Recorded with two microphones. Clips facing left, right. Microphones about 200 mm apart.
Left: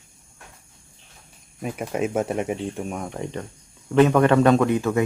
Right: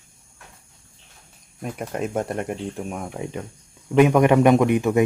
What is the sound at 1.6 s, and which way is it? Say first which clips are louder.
A man's voice: left 2 dB; 5° left (ahead or behind).